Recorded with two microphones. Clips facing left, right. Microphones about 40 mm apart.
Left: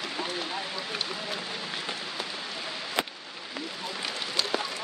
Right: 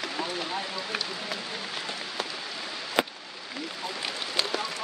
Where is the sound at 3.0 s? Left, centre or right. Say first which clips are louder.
Right 4 dB; centre.